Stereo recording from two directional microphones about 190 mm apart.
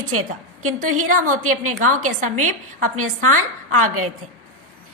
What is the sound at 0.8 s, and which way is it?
A woman's voice, 45° right (ahead or behind).